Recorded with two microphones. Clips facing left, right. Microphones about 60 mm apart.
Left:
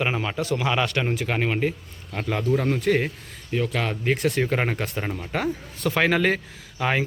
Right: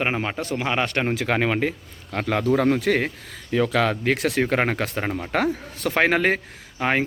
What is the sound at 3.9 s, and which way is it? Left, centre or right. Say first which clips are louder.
Speech: right 1 dB; right.